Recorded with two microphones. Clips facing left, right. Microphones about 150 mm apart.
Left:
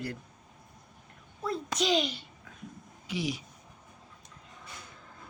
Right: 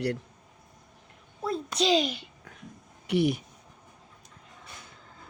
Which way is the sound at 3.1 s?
60° right (ahead or behind).